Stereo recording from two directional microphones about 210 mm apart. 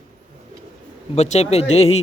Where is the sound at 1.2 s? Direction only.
30° left (ahead or behind).